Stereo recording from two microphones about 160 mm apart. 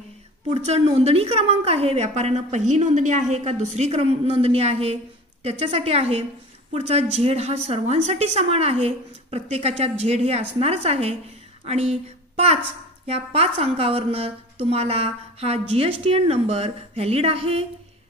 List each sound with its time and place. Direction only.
0.5 s a woman's voice: 40° right (ahead or behind)